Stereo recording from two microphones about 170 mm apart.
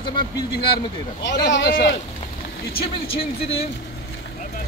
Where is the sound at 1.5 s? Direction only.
80° left.